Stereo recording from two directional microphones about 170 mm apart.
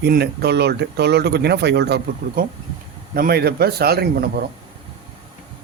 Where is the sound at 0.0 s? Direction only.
70° right (ahead or behind).